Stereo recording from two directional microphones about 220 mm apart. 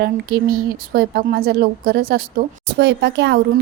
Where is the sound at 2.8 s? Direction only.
55° right (ahead or behind).